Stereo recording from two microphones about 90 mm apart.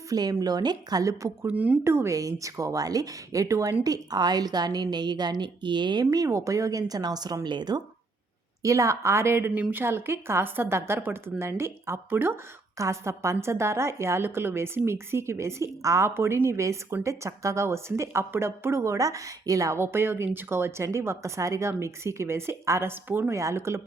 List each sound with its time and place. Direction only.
0.1 s a woman's voice: 45° right (ahead or behind)
1.5 s speech: 15° right (ahead or behind)
1.8 s a woman's voice: 30° right (ahead or behind)
3.8 s a woman's voice: 45° right (ahead or behind)
6.1 s a woman's voice: 40° right (ahead or behind); by 7.8 s 55° right (ahead or behind)
8.6 s a woman's voice: 35° right (ahead or behind)
12.7 s a woman's voice: 35° right (ahead or behind)
19.8 s a woman's voice: 25° right (ahead or behind)